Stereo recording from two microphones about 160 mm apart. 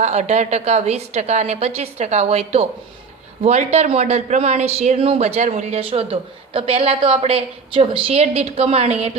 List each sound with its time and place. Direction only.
0.0 s a woman's voice: 45° right (ahead or behind)